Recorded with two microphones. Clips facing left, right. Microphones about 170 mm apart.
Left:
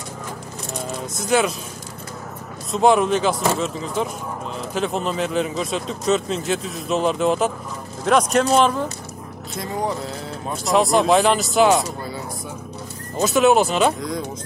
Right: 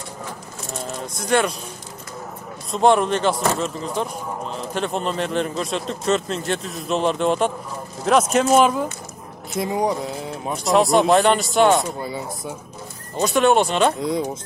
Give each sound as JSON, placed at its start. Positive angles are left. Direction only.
{"t": 1.1, "sound": "speech", "side_deg": 0}
{"t": 2.7, "sound": "speech", "side_deg": 0}
{"t": 9.6, "sound": "speech", "side_deg": -20}
{"t": 10.6, "sound": "speech", "side_deg": 0}
{"t": 13.2, "sound": "speech", "side_deg": 0}